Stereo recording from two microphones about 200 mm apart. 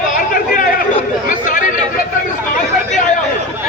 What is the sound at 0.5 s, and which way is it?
Chatter, 40° left (ahead or behind).